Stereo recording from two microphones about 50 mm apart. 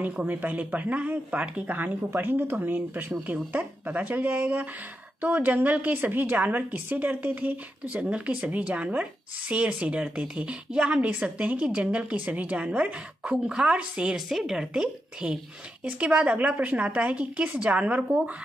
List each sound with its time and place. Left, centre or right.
0.0 s a woman's voice: right